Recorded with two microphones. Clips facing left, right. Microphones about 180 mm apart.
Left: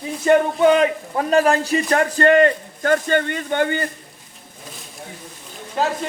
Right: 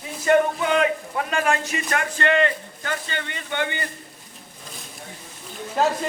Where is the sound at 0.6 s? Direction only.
35° left (ahead or behind).